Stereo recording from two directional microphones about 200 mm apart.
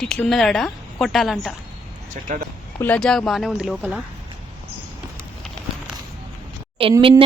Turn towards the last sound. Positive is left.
turn(degrees=-25)  # may be behind; listen again after turning